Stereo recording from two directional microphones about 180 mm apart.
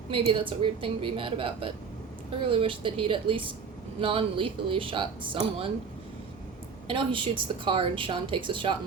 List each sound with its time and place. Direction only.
0.1 s a woman's voice: 30° right (ahead or behind)
6.8 s a woman's voice: 30° right (ahead or behind)